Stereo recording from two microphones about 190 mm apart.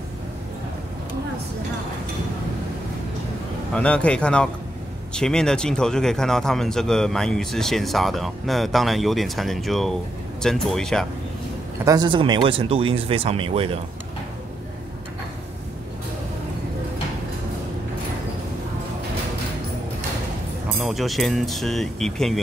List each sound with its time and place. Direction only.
3.7 s speech: 5° left (ahead or behind)
11.8 s speech: 20° right (ahead or behind)
20.7 s speech: centre (ahead or behind)